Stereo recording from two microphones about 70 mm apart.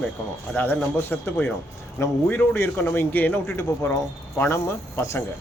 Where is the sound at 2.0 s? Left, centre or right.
Left.